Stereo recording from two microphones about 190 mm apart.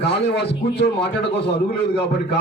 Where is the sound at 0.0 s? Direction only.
60° left (ahead or behind).